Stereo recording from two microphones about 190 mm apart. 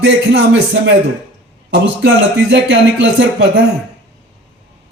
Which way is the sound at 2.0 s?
75° right (ahead or behind).